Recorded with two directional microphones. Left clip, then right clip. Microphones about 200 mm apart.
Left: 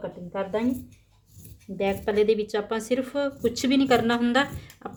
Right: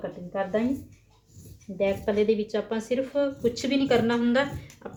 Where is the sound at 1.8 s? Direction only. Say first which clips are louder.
Left 1 dB; 55° left (ahead or behind).